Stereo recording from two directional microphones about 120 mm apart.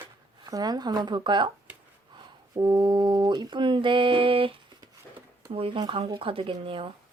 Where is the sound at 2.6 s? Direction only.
35° right (ahead or behind).